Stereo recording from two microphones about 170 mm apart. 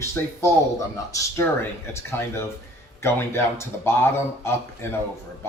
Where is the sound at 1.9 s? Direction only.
15° left (ahead or behind).